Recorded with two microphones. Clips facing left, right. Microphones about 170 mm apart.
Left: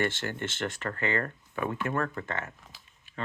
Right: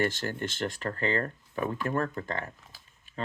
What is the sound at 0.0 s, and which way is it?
Speech, 40° right (ahead or behind).